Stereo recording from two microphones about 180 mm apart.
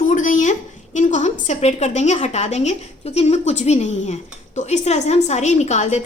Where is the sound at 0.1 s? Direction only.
45° left (ahead or behind).